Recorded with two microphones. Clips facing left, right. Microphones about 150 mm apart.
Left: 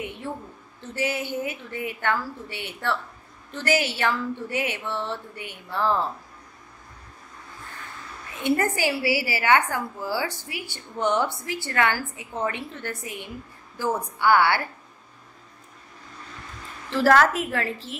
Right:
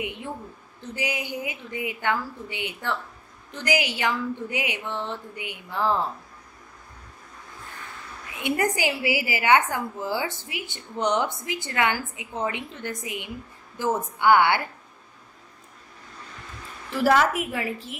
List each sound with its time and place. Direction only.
0.0 s a woman's voice: 15° right (ahead or behind)
8.4 s a woman's voice: 15° right (ahead or behind)
16.9 s a woman's voice: 10° right (ahead or behind)